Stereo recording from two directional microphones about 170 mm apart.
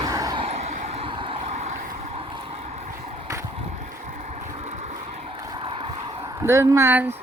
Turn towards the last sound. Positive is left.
turn(degrees=-10)  # may be behind; listen again after turning